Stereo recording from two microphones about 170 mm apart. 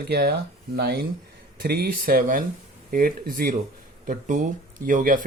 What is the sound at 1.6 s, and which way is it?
Speech, 65° right (ahead or behind).